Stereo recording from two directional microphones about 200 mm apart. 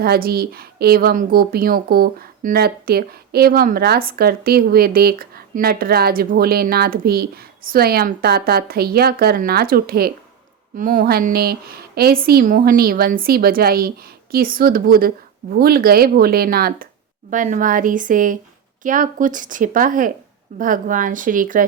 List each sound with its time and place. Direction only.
0.0 s a woman's voice: 50° right (ahead or behind)